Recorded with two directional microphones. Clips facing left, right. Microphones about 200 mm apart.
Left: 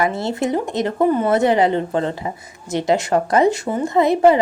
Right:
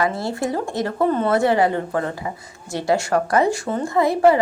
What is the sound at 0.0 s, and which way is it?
A woman's voice, 25° left (ahead or behind).